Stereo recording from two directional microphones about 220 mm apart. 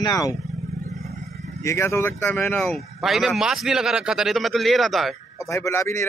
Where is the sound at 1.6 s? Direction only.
10° left (ahead or behind).